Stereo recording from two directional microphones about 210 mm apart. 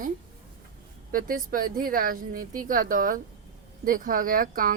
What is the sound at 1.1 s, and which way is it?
A woman's voice, 40° right (ahead or behind).